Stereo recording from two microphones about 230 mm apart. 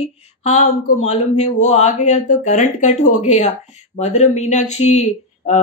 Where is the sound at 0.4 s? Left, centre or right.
Left.